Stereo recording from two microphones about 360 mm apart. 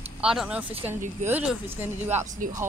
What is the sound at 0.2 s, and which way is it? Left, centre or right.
Speech, centre.